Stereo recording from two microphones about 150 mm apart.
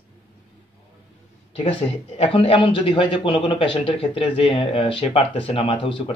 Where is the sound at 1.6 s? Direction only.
40° left (ahead or behind).